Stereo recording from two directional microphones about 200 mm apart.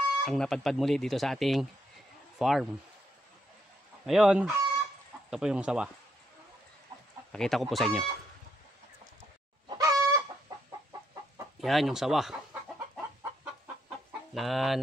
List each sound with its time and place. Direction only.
0.2 s speech: 5° left (ahead or behind)
4.0 s speech: centre (ahead or behind)
7.3 s speech: centre (ahead or behind)
9.2 s chicken: 15° right (ahead or behind)
11.6 s chicken: centre (ahead or behind)